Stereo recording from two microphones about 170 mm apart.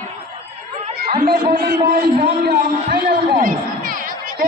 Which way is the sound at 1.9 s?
60° right (ahead or behind).